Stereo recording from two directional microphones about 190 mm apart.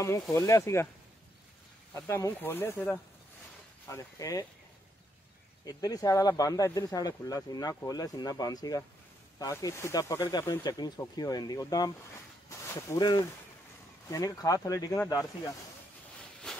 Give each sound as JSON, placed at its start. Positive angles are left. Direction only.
{"t": 0.0, "sound": "speech", "side_deg": 15}
{"t": 2.0, "sound": "speech", "side_deg": 15}
{"t": 5.7, "sound": "speech", "side_deg": 20}